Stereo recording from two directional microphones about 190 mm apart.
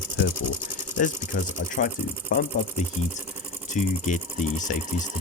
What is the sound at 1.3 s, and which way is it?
Speech, 45° left (ahead or behind).